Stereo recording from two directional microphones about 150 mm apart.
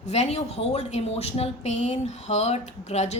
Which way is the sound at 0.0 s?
45° left (ahead or behind).